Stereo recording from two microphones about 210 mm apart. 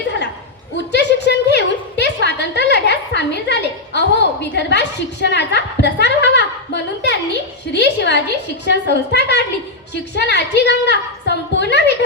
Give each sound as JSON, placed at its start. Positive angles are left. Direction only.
{"t": 0.9, "sound": "a woman's voice", "side_deg": 55}